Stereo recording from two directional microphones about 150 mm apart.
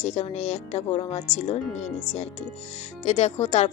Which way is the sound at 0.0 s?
50° left (ahead or behind).